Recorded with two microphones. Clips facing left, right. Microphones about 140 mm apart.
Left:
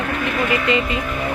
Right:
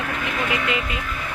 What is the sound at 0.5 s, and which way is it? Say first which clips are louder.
Speech: left 6 dB; 5° right (ahead or behind).